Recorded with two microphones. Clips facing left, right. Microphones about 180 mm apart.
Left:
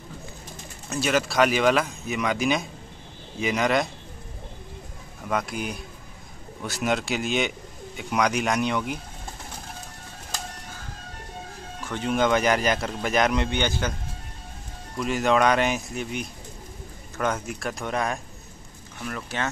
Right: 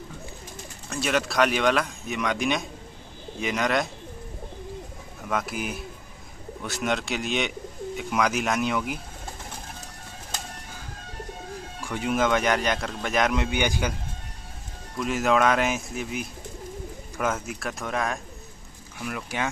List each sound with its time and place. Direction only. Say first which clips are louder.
0.8 s speech: left 2 dB; centre (ahead or behind)
5.3 s speech: left 1 dB; centre (ahead or behind)
11.8 s speech: left 1 dB; 10° right (ahead or behind)
15.0 s speech: left 1 dB; centre (ahead or behind)